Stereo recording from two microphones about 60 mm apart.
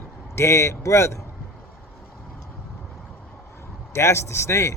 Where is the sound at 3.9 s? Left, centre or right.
Left.